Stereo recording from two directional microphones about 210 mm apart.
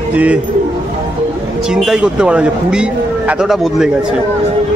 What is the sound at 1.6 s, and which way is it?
A man's voice, 5° right (ahead or behind).